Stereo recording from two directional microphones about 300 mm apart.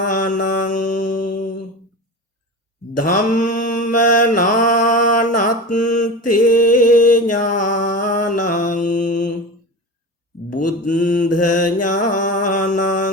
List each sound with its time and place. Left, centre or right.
0.1 s mantra: left
3.0 s mantra: left
6.3 s a sound: left
10.5 s mantra: left